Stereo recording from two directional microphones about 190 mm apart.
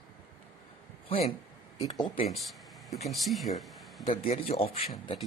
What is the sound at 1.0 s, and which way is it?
Speech, 30° left (ahead or behind).